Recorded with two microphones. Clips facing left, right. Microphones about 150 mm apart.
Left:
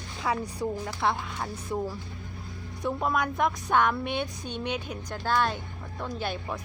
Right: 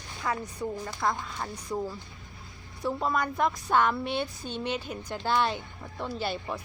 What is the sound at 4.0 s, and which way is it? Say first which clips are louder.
Speech: even; 55° left (ahead or behind).